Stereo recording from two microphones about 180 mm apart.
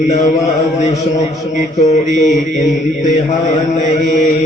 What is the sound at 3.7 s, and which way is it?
Mantra, 40° left (ahead or behind).